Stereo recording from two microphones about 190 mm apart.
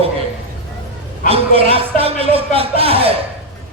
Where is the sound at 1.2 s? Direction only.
30° right (ahead or behind).